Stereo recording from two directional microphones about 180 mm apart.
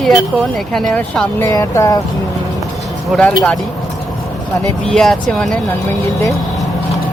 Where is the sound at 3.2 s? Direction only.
5° left (ahead or behind).